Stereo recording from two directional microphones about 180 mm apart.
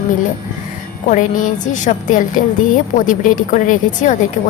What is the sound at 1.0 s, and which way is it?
Speech, 45° left (ahead or behind).